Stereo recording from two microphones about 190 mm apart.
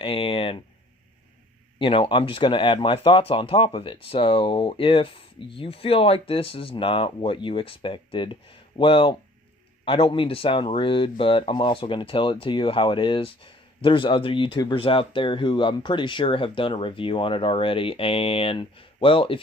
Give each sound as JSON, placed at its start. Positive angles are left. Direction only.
{"t": 0.0, "sound": "speech", "side_deg": 30}
{"t": 1.8, "sound": "speech", "side_deg": 30}